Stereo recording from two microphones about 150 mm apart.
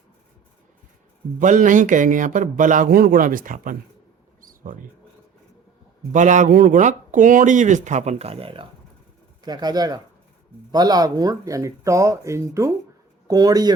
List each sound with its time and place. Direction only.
1.4 s speech: 60° right (ahead or behind)
4.4 s a sound: 65° right (ahead or behind)
6.1 s speech: 55° right (ahead or behind); by 8.6 s 40° right (ahead or behind)
9.4 s speech: 25° right (ahead or behind)